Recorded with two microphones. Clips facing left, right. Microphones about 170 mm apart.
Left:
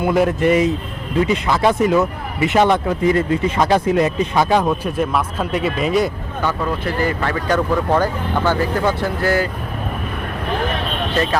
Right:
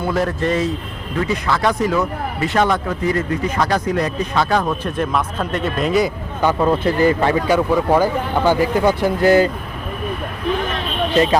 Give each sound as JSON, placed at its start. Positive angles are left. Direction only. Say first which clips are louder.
{"t": 0.0, "sound": "speech", "louder": "left 4 dB", "side_deg": 15}
{"t": 6.6, "sound": "speech", "louder": "right 8 dB", "side_deg": -25}
{"t": 7.4, "sound": "speech", "louder": "right 2 dB", "side_deg": -10}